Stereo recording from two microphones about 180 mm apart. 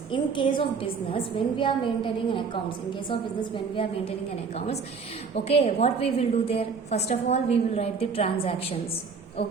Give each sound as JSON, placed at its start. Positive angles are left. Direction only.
{"t": 0.1, "sound": "a woman's voice", "side_deg": 25}
{"t": 5.3, "sound": "a woman's voice", "side_deg": 35}